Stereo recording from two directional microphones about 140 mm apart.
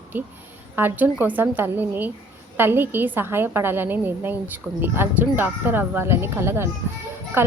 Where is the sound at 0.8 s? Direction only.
15° right (ahead or behind).